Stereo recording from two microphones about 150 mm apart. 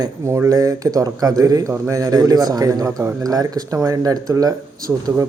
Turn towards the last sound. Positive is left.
turn(degrees=-25)  # may be behind; listen again after turning